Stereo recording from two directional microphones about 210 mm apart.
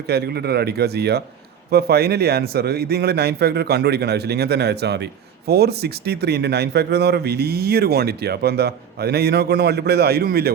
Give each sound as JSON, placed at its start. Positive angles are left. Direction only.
{"t": 0.1, "sound": "a man's voice", "side_deg": -50}